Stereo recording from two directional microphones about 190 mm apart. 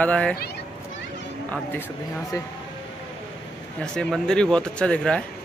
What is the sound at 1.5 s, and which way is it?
Speech, 10° left (ahead or behind).